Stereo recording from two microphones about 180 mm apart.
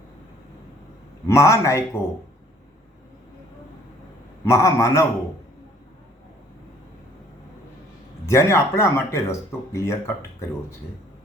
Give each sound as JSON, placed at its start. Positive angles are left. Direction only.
{"t": 1.3, "sound": "speech", "side_deg": 15}
{"t": 4.4, "sound": "speech", "side_deg": 15}
{"t": 8.3, "sound": "speech", "side_deg": 15}